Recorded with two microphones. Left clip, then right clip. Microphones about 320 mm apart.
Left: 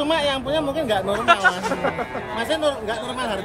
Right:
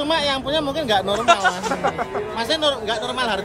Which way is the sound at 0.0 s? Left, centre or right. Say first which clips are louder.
Right 1 dB; centre.